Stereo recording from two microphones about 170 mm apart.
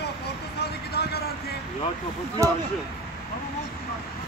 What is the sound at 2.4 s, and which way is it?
Speech, 20° right (ahead or behind).